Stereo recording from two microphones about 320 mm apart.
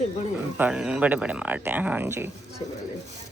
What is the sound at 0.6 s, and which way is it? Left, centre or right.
Speech, centre.